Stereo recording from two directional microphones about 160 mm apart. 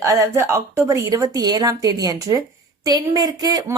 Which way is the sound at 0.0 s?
20° right (ahead or behind).